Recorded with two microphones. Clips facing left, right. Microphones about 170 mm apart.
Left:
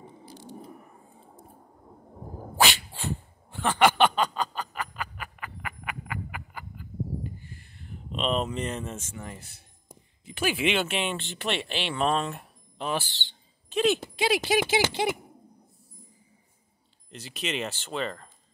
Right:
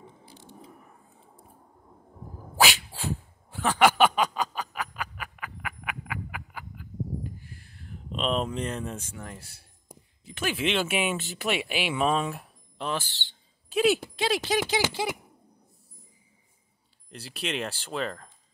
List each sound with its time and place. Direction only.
2.7 s dog: 5° right (ahead or behind)
4.0 s a sound: 10° right (ahead or behind)
9.1 s speech: 5° left (ahead or behind)
13.0 s speech: 20° left (ahead or behind)
13.7 s speech: 5° right (ahead or behind)
14.2 s speech: 5° left (ahead or behind)
14.5 s speech: 15° left (ahead or behind)
17.1 s speech: centre (ahead or behind)